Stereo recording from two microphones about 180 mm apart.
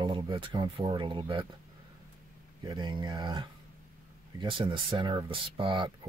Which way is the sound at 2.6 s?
25° right (ahead or behind).